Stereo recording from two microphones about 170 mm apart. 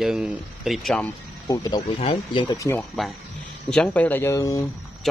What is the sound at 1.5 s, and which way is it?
Speech, 20° left (ahead or behind).